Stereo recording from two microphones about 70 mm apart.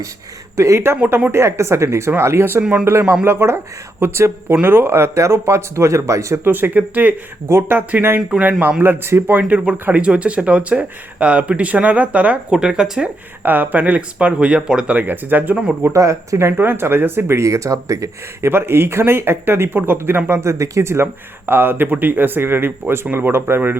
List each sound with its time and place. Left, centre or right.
0.5 s speech: right
6.4 s speech: right
7.4 s speech: right
7.8 s speech: right
8.8 s speech: right
10.0 s speech: centre
13.4 s speech: right
14.9 s speech: right
15.9 s speech: right
16.5 s speech: right
18.5 s speech: right
20.4 s speech: right